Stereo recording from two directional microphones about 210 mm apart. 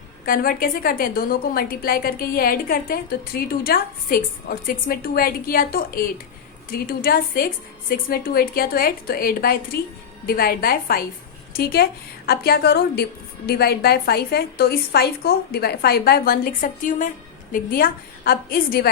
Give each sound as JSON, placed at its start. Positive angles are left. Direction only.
{"t": 0.3, "sound": "a woman's voice", "side_deg": 45}